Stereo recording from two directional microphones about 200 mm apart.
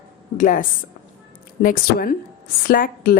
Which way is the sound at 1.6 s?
45° left (ahead or behind).